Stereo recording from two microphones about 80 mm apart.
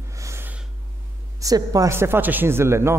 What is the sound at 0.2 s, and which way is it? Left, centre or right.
Snort, right.